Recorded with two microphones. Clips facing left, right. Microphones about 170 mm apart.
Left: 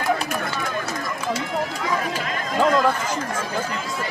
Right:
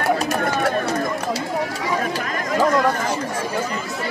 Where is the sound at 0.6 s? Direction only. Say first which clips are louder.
Right 7 dB; 65° right (ahead or behind).